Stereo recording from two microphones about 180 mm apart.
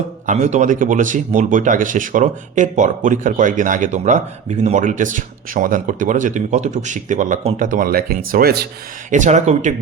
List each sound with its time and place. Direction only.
0.3 s speech: 40° right (ahead or behind); by 8.6 s 60° right (ahead or behind)
9.0 s speech: 45° right (ahead or behind)